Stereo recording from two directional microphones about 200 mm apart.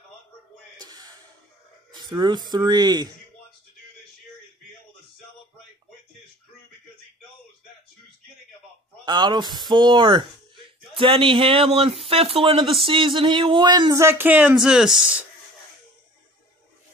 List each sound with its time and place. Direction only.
0.7 s gasp: 20° right (ahead or behind)
1.9 s a sound: 20° right (ahead or behind)
2.5 s speech: 20° right (ahead or behind)
9.0 s speech: 20° right (ahead or behind); by 15.2 s 5° right (ahead or behind)